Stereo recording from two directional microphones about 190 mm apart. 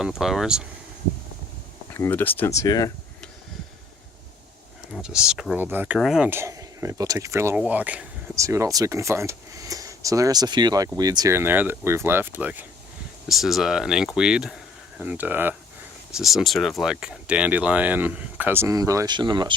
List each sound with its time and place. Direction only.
0.0 s speech: centre (ahead or behind)
1.9 s speech: 10° left (ahead or behind)
4.9 s speech: 5° right (ahead or behind); by 19.5 s 25° right (ahead or behind)